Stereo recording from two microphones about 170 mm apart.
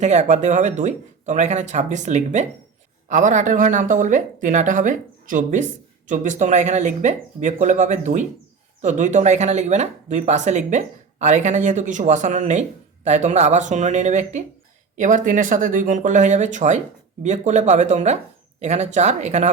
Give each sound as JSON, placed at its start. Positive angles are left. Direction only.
{"t": 0.0, "sound": "speech", "side_deg": -45}